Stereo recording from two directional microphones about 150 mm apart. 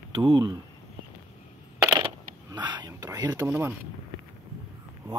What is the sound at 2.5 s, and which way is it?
Speech, 30° right (ahead or behind).